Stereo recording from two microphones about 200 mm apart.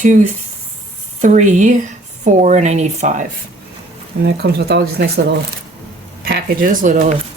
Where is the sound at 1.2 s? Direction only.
35° right (ahead or behind).